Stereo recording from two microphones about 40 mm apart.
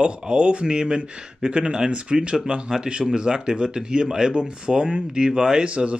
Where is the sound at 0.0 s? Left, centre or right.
Right.